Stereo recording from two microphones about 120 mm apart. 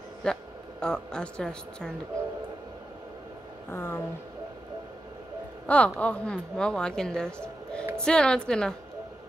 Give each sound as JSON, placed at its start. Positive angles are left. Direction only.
{"t": 0.2, "sound": "a woman's voice", "side_deg": 5}
{"t": 3.7, "sound": "speech", "side_deg": 20}
{"t": 5.7, "sound": "a woman's voice", "side_deg": 10}